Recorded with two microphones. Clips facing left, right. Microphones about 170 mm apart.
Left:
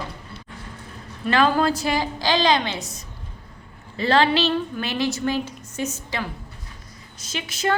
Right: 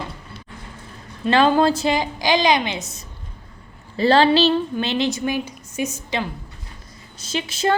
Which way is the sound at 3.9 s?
35° right (ahead or behind).